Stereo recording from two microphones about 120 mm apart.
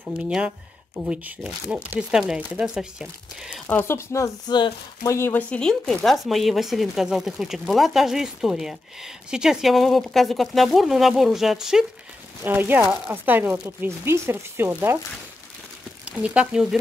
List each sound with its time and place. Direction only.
0.9 s speech: 10° right (ahead or behind)
3.6 s speech: 20° left (ahead or behind)
4.5 s speech: 40° left (ahead or behind)
5.1 s speech: 20° left (ahead or behind)
5.5 s speech: 5° left (ahead or behind)
12.4 s speech: 15° right (ahead or behind)
16.1 s speech: 10° right (ahead or behind)